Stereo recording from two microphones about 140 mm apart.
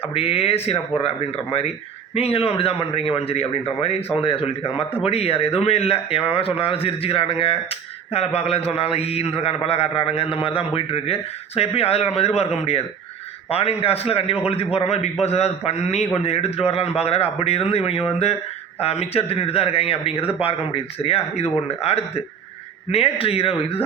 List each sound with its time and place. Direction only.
0.1 s speech: 45° left (ahead or behind)